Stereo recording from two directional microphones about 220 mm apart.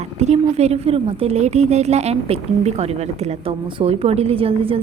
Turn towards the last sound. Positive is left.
turn(degrees=-25)  # may be behind; listen again after turning